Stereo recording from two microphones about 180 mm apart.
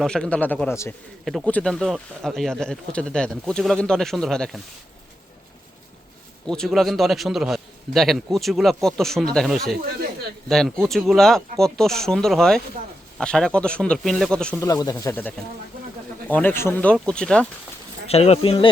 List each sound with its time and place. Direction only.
0.0 s speech: 5° left (ahead or behind)
1.2 s speech: centre (ahead or behind)
6.4 s speech: 5° left (ahead or behind)
14.6 s speech: 20° left (ahead or behind)
18.1 s speech: 35° left (ahead or behind)